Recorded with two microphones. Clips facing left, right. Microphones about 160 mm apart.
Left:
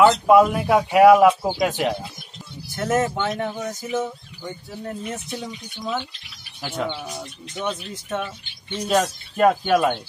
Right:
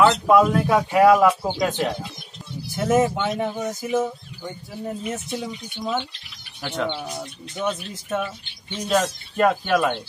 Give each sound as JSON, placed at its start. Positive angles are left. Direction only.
{"t": 0.0, "sound": "speech", "side_deg": 10}
{"t": 2.7, "sound": "speech", "side_deg": -5}
{"t": 8.8, "sound": "speech", "side_deg": 5}